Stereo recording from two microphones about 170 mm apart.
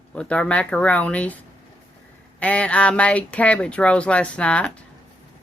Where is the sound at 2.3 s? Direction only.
10° left (ahead or behind).